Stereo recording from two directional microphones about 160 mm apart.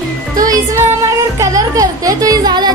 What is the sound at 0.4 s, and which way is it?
Music, 25° right (ahead or behind).